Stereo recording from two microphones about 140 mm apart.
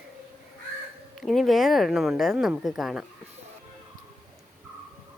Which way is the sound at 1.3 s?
Centre (ahead or behind).